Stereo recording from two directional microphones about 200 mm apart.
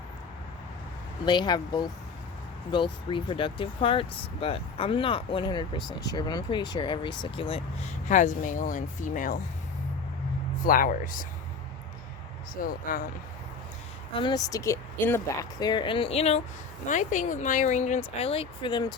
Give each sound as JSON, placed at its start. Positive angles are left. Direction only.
{"t": 1.2, "sound": "speech", "side_deg": 20}
{"t": 10.6, "sound": "speech", "side_deg": 45}
{"t": 12.6, "sound": "speech", "side_deg": 45}
{"t": 14.1, "sound": "speech", "side_deg": 25}